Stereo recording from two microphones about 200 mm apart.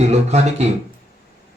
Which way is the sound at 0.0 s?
35° right (ahead or behind).